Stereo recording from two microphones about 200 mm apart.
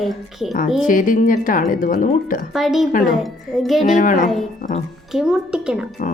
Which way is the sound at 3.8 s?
40° left (ahead or behind).